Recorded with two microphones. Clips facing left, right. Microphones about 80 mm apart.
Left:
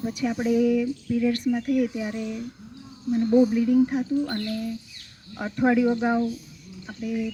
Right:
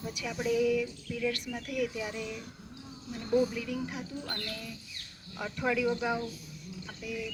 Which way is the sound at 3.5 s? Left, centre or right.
Left.